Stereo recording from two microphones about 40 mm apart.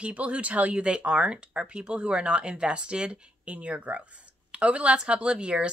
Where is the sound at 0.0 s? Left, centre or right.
Right.